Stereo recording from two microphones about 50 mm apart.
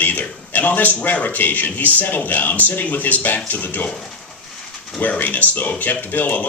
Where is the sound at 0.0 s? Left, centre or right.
Left.